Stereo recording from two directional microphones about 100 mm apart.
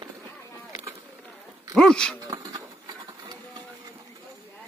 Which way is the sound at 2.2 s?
40° right (ahead or behind).